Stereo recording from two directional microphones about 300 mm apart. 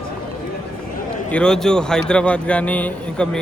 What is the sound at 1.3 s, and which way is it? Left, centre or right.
A man's voice, centre.